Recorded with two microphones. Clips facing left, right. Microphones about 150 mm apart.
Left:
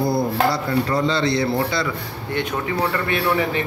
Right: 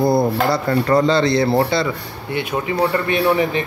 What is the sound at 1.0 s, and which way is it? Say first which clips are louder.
Speech: right 4 dB; 40° right (ahead or behind).